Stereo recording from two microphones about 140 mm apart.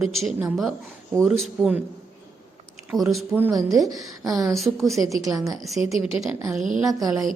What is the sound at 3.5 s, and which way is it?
Speech, 25° right (ahead or behind).